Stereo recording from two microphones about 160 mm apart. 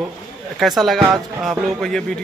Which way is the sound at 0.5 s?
Centre (ahead or behind).